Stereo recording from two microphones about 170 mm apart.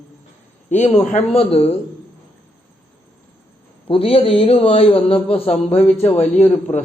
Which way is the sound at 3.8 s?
35° left (ahead or behind).